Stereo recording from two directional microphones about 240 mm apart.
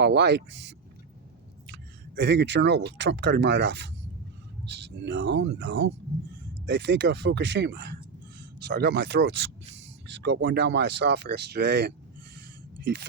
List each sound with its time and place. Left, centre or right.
0.0 s speech: right